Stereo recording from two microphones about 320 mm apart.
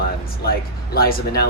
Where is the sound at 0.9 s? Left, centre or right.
Left.